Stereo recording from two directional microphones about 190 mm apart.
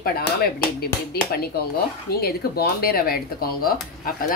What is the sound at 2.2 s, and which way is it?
Speech, 55° left (ahead or behind).